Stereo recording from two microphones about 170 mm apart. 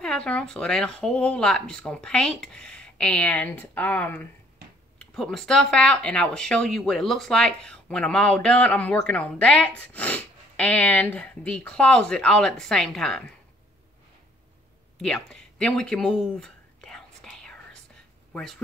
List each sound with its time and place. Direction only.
0.0 s speech: 5° left (ahead or behind)
15.0 s a sound: 5° left (ahead or behind)
18.3 s speech: 5° left (ahead or behind)